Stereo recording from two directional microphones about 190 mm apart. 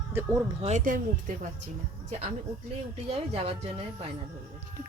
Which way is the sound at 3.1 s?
30° right (ahead or behind).